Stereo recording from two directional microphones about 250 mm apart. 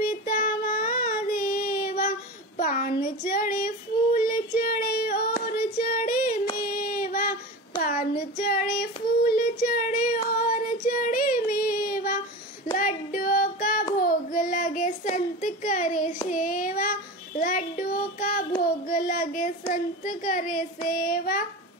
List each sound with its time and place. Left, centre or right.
0.0 s child singing: left